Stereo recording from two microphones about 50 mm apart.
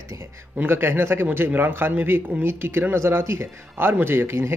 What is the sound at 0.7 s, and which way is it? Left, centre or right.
Speech, right.